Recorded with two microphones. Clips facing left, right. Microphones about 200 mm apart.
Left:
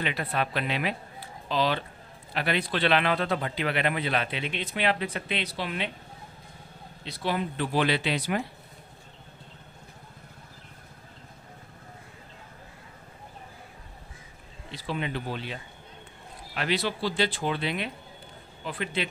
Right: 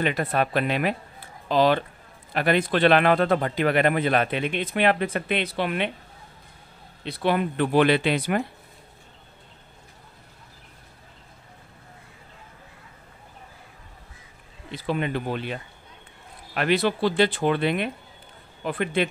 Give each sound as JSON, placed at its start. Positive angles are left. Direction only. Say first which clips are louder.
{"t": 0.0, "sound": "a man's voice", "louder": "right 6 dB", "side_deg": -50}
{"t": 7.1, "sound": "speech", "louder": "right 6 dB", "side_deg": -60}
{"t": 14.7, "sound": "a man's voice", "louder": "right 6 dB", "side_deg": -55}